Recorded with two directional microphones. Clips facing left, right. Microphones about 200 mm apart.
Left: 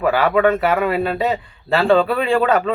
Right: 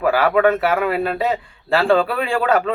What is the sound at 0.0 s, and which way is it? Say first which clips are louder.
Speech: even; centre (ahead or behind).